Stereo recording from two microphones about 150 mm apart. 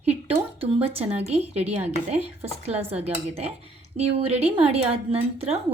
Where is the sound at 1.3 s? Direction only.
45° right (ahead or behind).